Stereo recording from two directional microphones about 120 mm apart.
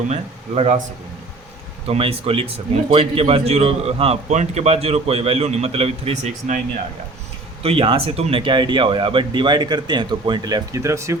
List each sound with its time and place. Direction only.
0.1 s a man's voice: 65° right (ahead or behind)
1.9 s a man's voice: 55° right (ahead or behind)
7.6 s speech: 55° right (ahead or behind); by 11.2 s 25° right (ahead or behind)